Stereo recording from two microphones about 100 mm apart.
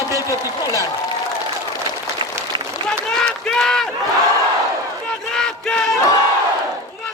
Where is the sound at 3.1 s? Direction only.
5° left (ahead or behind).